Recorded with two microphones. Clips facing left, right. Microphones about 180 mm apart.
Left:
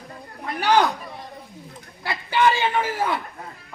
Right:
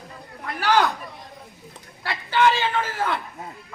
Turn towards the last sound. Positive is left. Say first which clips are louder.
# left 2 dB
turn(degrees=15)  # may be behind; listen again after turning